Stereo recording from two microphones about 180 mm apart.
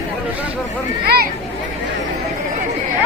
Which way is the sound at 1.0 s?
60° right (ahead or behind).